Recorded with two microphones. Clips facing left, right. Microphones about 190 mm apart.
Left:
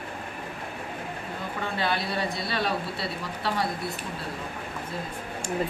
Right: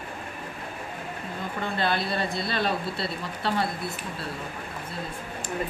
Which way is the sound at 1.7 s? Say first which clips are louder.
Right 2 dB; 10° left (ahead or behind).